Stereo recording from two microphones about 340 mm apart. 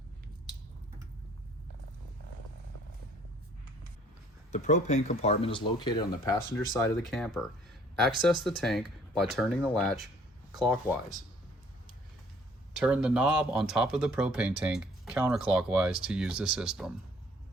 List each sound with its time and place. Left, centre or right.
4.5 s speech: left
6.7 s speech: centre
12.8 s speech: centre